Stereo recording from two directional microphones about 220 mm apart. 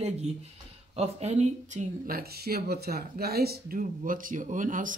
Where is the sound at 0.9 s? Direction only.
30° right (ahead or behind).